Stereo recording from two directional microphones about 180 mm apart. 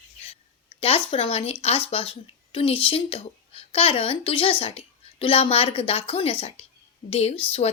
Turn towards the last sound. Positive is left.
turn(degrees=35)  # may be behind; listen again after turning